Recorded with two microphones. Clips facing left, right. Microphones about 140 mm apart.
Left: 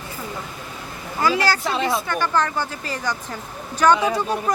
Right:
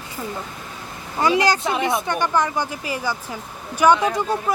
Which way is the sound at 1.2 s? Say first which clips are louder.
Right 2 dB; 20° right (ahead or behind).